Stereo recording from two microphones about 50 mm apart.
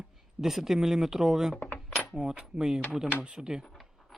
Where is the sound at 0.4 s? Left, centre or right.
Centre.